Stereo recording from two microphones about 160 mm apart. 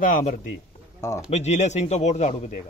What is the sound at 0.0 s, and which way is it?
Speech, 55° left (ahead or behind).